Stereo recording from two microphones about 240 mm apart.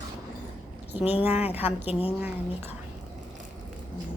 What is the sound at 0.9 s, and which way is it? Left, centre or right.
Speech, left.